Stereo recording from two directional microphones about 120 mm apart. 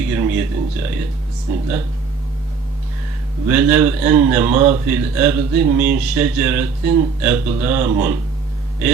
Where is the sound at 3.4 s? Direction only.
15° right (ahead or behind).